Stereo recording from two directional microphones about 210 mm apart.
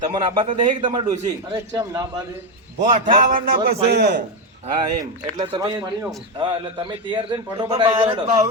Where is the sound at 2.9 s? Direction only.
40° right (ahead or behind).